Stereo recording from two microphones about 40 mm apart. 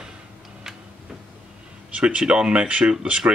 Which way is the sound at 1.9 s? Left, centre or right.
Right.